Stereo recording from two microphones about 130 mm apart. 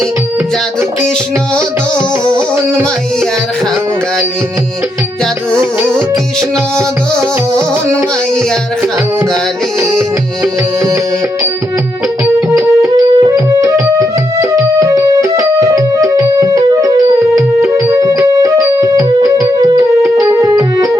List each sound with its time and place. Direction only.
2.2 s music: 30° right (ahead or behind)
12.2 s music: 20° right (ahead or behind)